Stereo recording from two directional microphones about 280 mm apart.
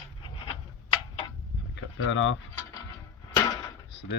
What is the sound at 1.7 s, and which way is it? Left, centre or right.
Speech, left.